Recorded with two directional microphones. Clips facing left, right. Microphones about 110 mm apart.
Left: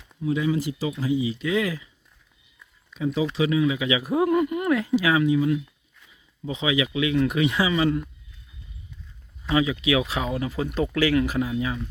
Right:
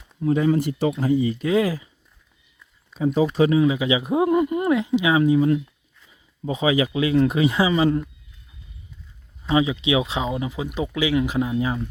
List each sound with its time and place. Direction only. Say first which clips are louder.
0.2 s speech: right 5 dB; 45° right (ahead or behind)
1.5 s speech: right 5 dB; 35° right (ahead or behind)
2.9 s speech: right 5 dB; 40° right (ahead or behind); by 5.2 s 20° right (ahead or behind)
5.2 s speech: right 3 dB; 35° right (ahead or behind)
9.5 s speech: right 2 dB; 25° right (ahead or behind)